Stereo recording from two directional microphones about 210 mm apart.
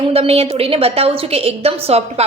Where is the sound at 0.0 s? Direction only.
30° right (ahead or behind).